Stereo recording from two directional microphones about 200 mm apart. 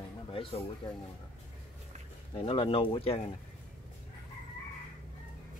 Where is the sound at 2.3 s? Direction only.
25° left (ahead or behind).